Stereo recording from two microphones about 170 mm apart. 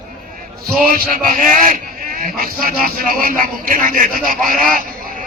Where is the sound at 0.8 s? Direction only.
55° right (ahead or behind).